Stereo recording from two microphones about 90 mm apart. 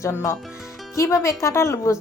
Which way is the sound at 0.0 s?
30° left (ahead or behind).